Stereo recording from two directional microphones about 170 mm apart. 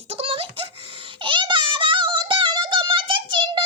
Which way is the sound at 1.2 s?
30° right (ahead or behind).